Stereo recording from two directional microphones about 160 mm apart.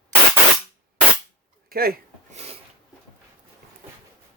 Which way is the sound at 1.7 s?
70° right (ahead or behind).